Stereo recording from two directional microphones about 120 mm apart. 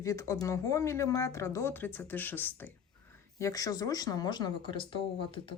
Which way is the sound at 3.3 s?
30° left (ahead or behind).